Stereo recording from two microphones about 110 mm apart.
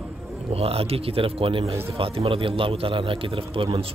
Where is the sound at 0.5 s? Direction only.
60° right (ahead or behind).